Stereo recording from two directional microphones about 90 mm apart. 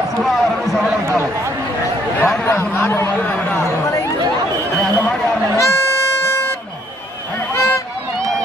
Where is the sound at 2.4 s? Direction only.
25° left (ahead or behind).